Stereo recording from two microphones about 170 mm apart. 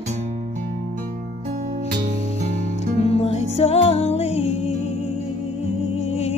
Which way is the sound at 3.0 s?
35° left (ahead or behind).